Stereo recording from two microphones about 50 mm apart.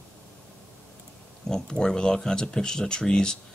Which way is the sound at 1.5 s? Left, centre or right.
Centre.